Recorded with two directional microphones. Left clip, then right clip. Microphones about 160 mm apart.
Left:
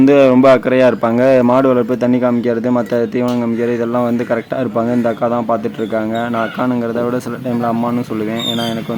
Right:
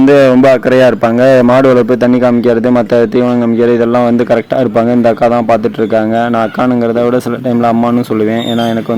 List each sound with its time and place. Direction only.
0.0 s speech: 30° right (ahead or behind)